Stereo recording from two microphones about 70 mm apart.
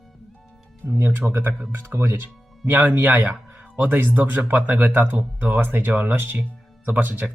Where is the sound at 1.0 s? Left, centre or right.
Right.